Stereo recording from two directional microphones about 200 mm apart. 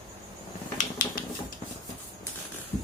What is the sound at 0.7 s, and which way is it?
Finger snapping, 40° left (ahead or behind).